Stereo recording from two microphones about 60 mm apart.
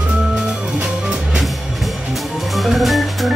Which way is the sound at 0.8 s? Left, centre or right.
Centre.